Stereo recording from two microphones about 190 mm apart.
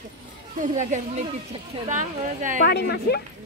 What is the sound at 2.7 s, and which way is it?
Speech, 60° left (ahead or behind).